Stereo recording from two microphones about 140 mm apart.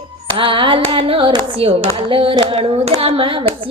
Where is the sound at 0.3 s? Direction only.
40° right (ahead or behind).